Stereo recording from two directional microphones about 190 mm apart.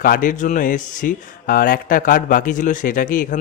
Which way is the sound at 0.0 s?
45° left (ahead or behind).